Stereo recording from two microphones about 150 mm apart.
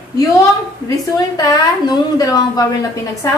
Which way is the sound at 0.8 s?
25° left (ahead or behind).